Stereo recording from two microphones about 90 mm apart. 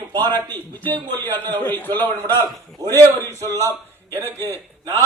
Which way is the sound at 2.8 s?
40° right (ahead or behind).